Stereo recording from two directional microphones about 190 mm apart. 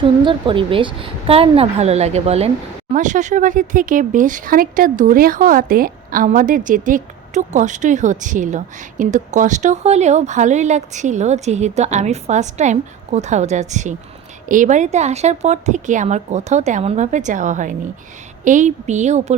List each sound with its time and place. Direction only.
0.0 s speech: 25° right (ahead or behind)